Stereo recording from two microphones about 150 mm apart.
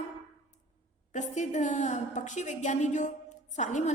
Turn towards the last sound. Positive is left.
turn(degrees=50)  # may be behind; listen again after turning